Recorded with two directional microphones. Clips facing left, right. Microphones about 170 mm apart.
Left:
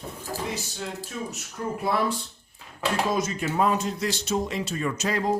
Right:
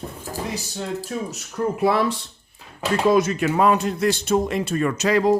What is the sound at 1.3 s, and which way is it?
Speech, 85° right.